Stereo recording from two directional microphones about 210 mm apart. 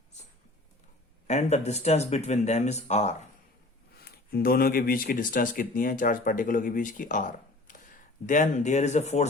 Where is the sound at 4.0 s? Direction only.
45° left (ahead or behind).